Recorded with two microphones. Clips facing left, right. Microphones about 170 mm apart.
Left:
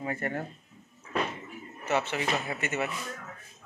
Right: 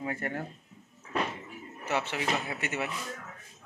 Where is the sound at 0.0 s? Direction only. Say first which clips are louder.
Left 2 dB; 10° right (ahead or behind).